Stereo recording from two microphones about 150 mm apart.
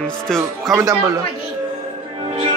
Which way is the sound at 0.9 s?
20° right (ahead or behind).